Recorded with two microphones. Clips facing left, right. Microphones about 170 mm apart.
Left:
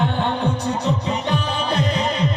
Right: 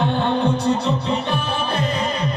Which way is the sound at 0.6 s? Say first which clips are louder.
Right 2 dB; 15° left (ahead or behind).